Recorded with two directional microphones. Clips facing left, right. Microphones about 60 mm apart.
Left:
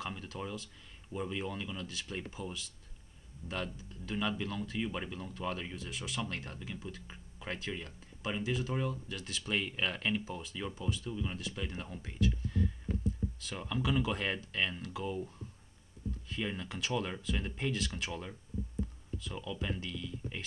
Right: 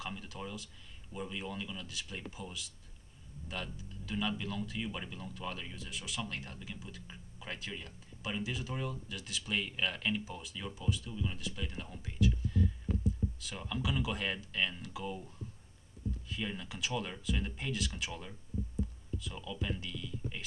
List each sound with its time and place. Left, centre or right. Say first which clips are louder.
0.0 s speech: left 2 dB; centre
1.9 s speech: left 2 dB; centre
2.1 s speech: left 5 dB; centre
5.8 s speech: left 2 dB; centre
11.1 s speech: left 2 dB; centre
12.0 s a sound: right 1 dB; centre
13.6 s speech: left 3 dB; centre
16.3 s speech: left 4 dB; centre
19.3 s speech: left 2 dB; centre